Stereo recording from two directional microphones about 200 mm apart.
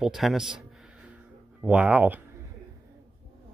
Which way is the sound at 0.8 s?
5° right (ahead or behind).